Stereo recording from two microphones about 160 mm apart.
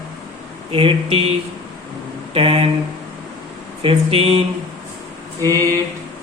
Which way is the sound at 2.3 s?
35° right (ahead or behind).